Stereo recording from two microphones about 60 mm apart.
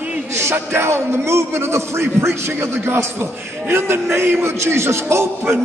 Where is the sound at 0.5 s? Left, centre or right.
Right.